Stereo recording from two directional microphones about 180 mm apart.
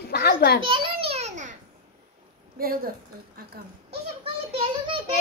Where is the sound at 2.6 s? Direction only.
55° right (ahead or behind).